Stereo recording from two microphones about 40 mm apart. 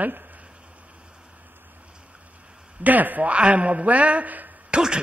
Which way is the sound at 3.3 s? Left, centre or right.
Right.